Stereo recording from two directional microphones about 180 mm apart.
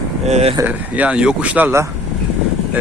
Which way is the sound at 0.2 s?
35° right (ahead or behind).